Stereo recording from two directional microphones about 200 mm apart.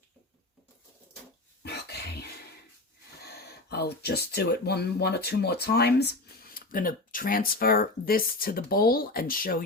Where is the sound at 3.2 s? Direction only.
55° left (ahead or behind).